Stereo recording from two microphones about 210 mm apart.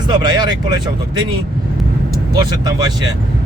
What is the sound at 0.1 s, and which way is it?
Speech, 20° right (ahead or behind).